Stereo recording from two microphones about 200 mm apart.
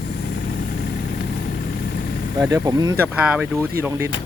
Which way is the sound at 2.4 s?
20° right (ahead or behind).